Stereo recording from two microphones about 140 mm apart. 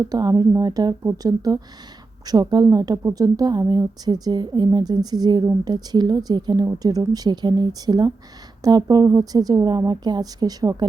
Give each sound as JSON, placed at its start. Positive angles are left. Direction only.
{"t": 0.0, "sound": "a woman's voice", "side_deg": -25}